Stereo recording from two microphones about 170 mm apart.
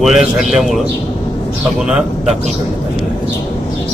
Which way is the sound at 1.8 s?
5° right (ahead or behind).